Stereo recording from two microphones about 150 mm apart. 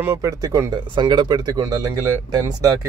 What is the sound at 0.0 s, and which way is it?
Speech, 20° right (ahead or behind).